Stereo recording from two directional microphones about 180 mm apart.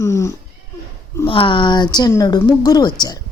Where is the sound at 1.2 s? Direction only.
30° left (ahead or behind).